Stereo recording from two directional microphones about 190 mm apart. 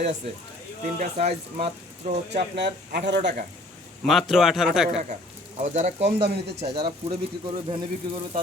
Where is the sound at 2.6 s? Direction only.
65° right (ahead or behind).